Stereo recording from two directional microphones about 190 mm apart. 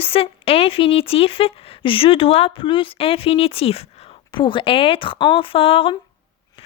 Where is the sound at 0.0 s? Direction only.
30° left (ahead or behind).